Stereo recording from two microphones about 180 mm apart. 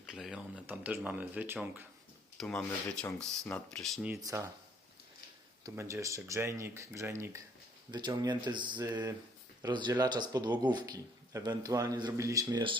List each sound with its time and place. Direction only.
0.0 s speech: 5° right (ahead or behind)
2.4 s speech: 5° left (ahead or behind)
4.0 s speech: 15° right (ahead or behind)
5.6 s speech: 15° right (ahead or behind)